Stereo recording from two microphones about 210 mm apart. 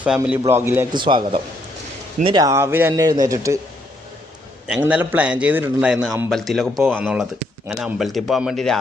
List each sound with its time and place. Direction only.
0.0 s speech: 5° right (ahead or behind)
0.9 s speech: 20° right (ahead or behind)
4.6 s a man's voice: 5° right (ahead or behind)